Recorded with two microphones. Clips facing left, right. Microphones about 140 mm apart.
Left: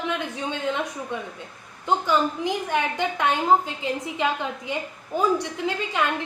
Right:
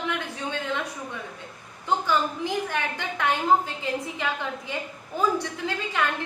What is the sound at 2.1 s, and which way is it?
A woman's voice, 20° left (ahead or behind).